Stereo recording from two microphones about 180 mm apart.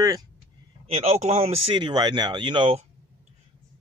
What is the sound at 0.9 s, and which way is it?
Speech, 40° right (ahead or behind).